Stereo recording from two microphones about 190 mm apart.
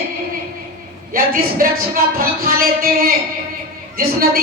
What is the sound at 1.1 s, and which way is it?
A woman's voice, 50° right (ahead or behind).